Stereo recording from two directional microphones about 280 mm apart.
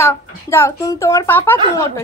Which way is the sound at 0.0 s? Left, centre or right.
Centre.